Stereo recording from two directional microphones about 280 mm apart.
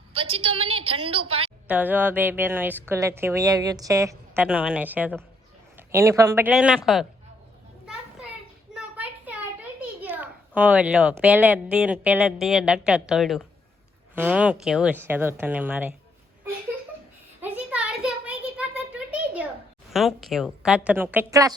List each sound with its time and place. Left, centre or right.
0.1 s a woman's voice: centre
1.6 s a woman's voice: centre
8.7 s a sound: centre
10.0 s a child's voice: centre
17.4 s a sound: centre
19.9 s a child's voice: centre